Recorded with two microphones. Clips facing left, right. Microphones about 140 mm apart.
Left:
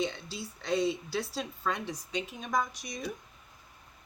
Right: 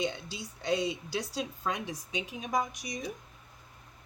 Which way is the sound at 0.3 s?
15° right (ahead or behind).